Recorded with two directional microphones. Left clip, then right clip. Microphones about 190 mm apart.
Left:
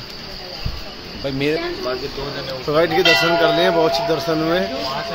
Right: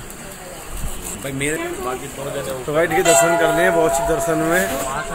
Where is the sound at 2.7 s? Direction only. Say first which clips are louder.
Even; 25° left (ahead or behind).